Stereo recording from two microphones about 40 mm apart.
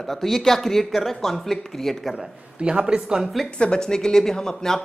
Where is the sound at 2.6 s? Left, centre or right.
Right.